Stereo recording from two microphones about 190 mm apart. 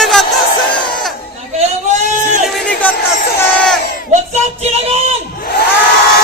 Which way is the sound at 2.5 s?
5° left (ahead or behind).